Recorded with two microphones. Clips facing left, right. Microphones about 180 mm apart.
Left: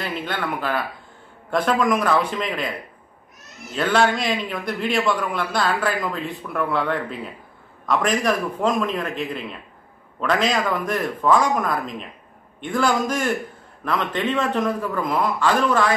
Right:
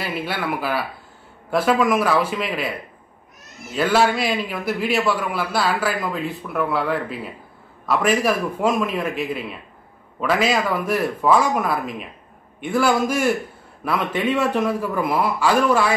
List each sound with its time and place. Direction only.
0.0 s a man's voice: 10° right (ahead or behind)
3.7 s a man's voice: 5° right (ahead or behind)